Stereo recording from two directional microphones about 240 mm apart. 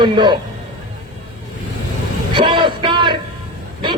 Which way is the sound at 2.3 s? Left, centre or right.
Right.